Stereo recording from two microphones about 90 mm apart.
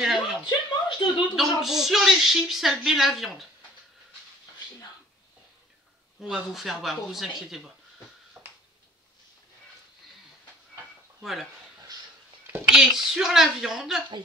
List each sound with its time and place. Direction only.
0.0 s a sound: 5° right (ahead or behind)
0.5 s a sound: 55° left (ahead or behind)
1.3 s speech: 5° right (ahead or behind)
6.2 s speech: centre (ahead or behind)
8.4 s finger snapping: 15° right (ahead or behind)
12.7 s speech: 5° right (ahead or behind)